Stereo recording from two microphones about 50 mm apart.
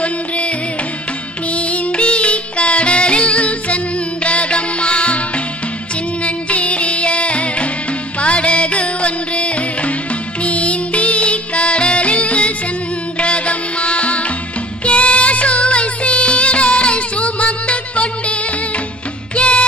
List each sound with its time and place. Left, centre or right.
0.0 s music: left
1.5 s music: left
6.2 s music: left
19.4 s music: left